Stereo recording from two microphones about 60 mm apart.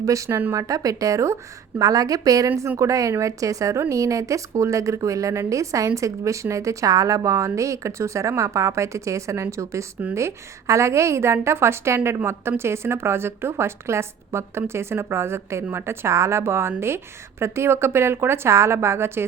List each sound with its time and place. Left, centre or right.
0.0 s a woman's voice: right
1.8 s a woman's voice: right